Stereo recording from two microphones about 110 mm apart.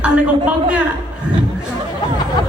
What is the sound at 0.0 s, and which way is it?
Speech, 10° right (ahead or behind).